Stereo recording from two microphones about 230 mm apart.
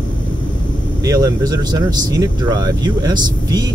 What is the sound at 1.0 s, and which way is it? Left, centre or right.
Speech, centre.